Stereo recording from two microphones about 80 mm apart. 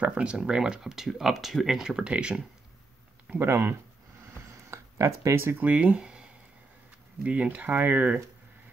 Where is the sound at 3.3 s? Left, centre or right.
Right; by 6.2 s centre.